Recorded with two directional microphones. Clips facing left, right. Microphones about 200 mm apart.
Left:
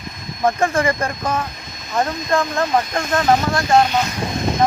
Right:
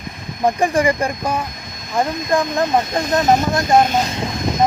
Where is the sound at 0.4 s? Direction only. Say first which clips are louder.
Right 2 dB; 15° right (ahead or behind).